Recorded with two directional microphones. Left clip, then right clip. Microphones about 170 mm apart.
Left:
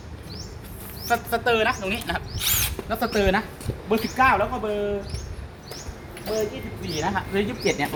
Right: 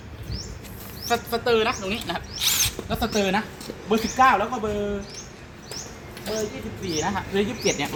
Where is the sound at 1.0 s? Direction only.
10° left (ahead or behind); by 4.4 s 5° right (ahead or behind).